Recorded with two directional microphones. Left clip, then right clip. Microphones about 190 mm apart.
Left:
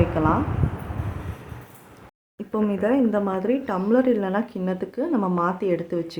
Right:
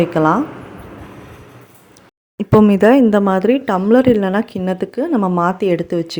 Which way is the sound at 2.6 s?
50° right (ahead or behind).